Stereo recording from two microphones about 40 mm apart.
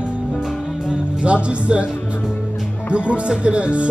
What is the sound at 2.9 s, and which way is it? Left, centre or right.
Speech, right.